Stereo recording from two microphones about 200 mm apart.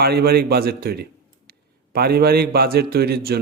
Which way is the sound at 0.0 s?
50° right (ahead or behind).